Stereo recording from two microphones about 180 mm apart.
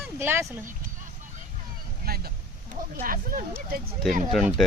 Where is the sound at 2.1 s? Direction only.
60° right (ahead or behind).